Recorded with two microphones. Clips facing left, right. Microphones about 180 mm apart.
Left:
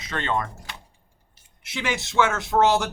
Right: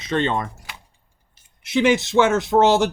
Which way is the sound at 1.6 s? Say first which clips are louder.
Right 11 dB; 20° right (ahead or behind).